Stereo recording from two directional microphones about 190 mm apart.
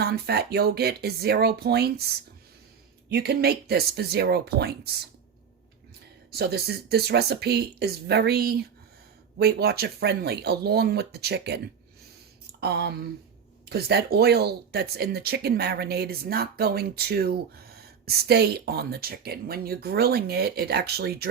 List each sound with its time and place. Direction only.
0.0 s speech: 55° right (ahead or behind)
3.1 s speech: 55° right (ahead or behind)
6.3 s speech: 55° right (ahead or behind)